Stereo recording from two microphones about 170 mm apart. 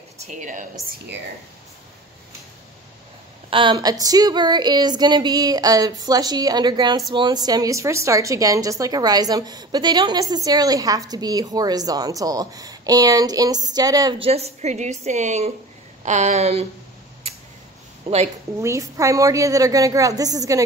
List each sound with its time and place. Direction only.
0.2 s speech: 45° right (ahead or behind)
0.8 s speech: 70° right (ahead or behind)
3.4 s a woman's voice: 30° right (ahead or behind)
14.2 s a woman's voice: 40° right (ahead or behind)
18.0 s a woman's voice: 35° right (ahead or behind)
18.6 s a woman's voice: 20° right (ahead or behind)